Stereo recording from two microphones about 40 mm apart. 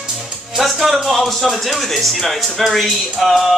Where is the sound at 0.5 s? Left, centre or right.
Centre.